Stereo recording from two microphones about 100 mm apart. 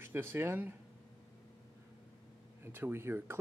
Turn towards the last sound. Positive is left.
turn(degrees=-25)  # may be behind; listen again after turning